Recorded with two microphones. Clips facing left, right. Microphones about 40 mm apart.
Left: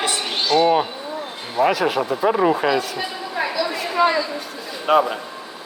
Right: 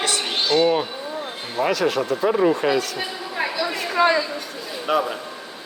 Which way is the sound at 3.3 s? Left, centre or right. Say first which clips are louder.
Left 2 dB; centre.